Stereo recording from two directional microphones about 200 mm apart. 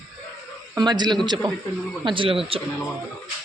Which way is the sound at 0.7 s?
20° right (ahead or behind).